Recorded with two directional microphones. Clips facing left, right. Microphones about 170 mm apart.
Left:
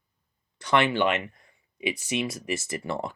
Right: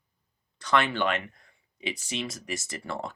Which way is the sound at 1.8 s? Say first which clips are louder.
Left 5 dB; 10° left (ahead or behind).